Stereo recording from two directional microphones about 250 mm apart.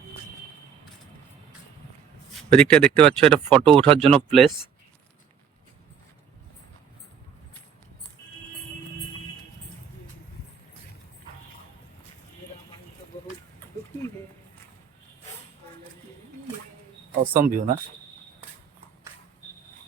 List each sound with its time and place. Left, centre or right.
2.5 s speech: centre
3.6 s speech: right
4.0 s speech: centre
17.3 s speech: right